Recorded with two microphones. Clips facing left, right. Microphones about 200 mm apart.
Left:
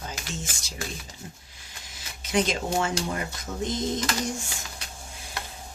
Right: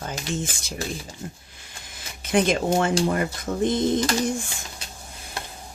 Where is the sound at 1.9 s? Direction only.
55° right (ahead or behind).